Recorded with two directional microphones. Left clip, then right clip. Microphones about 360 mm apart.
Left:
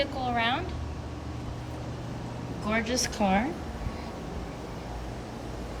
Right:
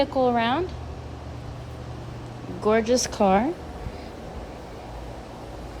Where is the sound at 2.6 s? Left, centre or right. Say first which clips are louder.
Right 8 dB; centre.